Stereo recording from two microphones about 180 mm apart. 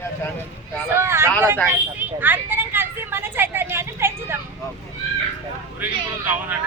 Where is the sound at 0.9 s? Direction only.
15° right (ahead or behind).